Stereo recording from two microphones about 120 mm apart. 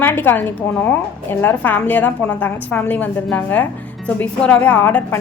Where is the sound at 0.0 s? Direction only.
20° left (ahead or behind).